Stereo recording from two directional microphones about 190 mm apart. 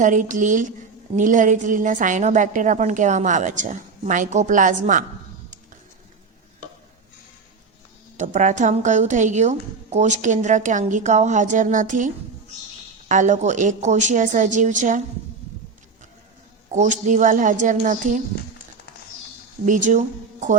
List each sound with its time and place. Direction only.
0.0 s a woman's voice: 40° right (ahead or behind)
8.1 s a woman's voice: 40° right (ahead or behind)
16.6 s a woman's voice: 40° right (ahead or behind)
19.6 s speech: 40° right (ahead or behind)